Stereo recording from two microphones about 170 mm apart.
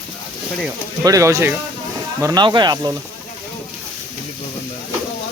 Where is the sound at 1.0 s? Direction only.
20° right (ahead or behind).